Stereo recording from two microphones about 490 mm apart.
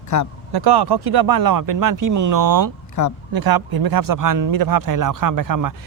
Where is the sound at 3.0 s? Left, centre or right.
Left.